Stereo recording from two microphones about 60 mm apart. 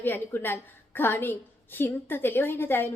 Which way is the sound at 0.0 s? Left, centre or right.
Left.